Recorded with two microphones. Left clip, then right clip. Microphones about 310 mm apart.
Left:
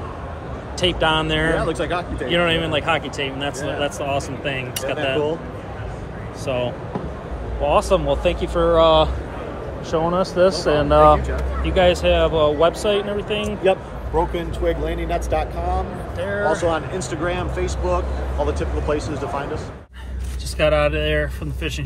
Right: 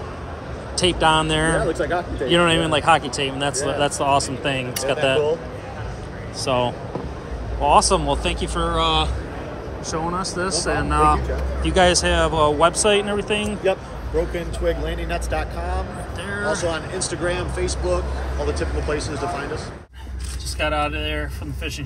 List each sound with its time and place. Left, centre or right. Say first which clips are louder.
0.7 s speech: right 1 dB; centre
1.7 s speech: even; left
2.3 s speech: right 1 dB; centre
6.4 s speech: right 2 dB; centre
11.6 s speech: left 1 dB; centre
13.6 s speech: left 6 dB; left
16.2 s speech: left 4 dB; centre
16.6 s speech: left 3 dB; left
20.5 s speech: left 5 dB; centre